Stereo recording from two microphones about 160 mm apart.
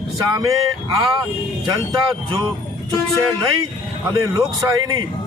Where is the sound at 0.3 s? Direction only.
25° right (ahead or behind).